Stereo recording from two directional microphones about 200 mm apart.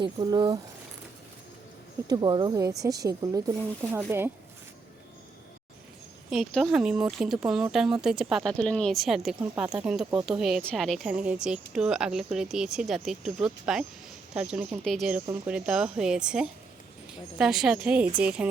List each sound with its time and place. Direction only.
0.0 s speech: 20° right (ahead or behind)
2.0 s speech: 20° right (ahead or behind)
6.3 s speech: centre (ahead or behind)